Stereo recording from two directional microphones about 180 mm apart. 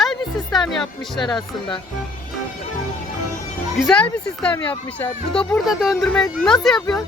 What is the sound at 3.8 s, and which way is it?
Speech, 5° left (ahead or behind).